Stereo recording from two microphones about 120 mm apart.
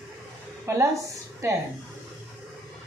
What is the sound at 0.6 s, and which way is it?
Speech, 25° right (ahead or behind).